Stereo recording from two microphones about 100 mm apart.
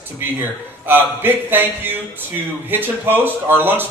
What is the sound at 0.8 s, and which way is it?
A man's voice, 20° right (ahead or behind).